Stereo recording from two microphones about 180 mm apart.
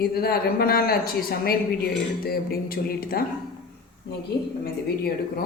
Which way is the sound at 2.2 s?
55° left (ahead or behind).